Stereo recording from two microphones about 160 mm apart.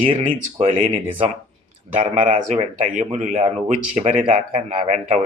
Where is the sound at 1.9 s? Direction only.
50° right (ahead or behind).